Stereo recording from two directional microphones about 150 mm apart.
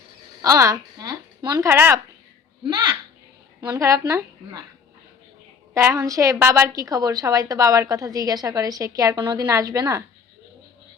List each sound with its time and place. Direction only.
0.4 s speech: 20° right (ahead or behind)
2.6 s a woman's voice: 25° right (ahead or behind)
5.7 s a woman's voice: 20° right (ahead or behind)